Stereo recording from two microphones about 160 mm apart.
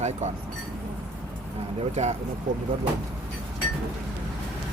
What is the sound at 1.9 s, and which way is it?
Speech, 45° right (ahead or behind).